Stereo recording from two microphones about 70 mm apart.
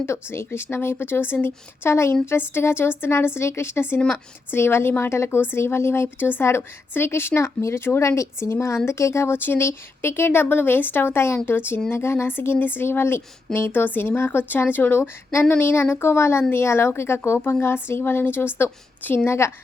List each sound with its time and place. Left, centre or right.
0.0 s speech: left